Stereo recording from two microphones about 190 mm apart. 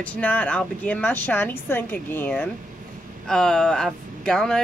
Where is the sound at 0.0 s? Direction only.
5° left (ahead or behind).